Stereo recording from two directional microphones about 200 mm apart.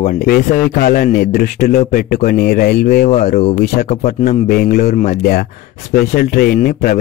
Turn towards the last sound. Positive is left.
turn(degrees=50)  # may be behind; listen again after turning